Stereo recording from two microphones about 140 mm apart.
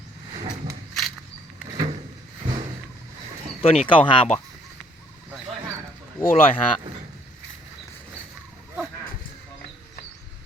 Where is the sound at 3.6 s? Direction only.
45° left (ahead or behind).